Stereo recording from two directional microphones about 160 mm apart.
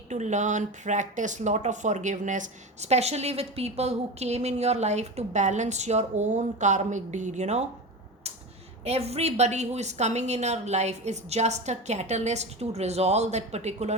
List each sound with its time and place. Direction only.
0.1 s speech: 50° right (ahead or behind)
8.8 s speech: 40° right (ahead or behind)